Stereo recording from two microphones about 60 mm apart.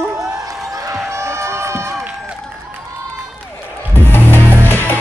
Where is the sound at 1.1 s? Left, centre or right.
Right.